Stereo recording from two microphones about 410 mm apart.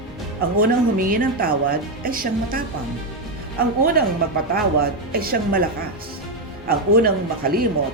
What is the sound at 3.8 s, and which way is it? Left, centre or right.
Speech, right.